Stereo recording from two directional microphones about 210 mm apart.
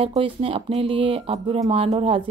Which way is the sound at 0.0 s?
25° right (ahead or behind).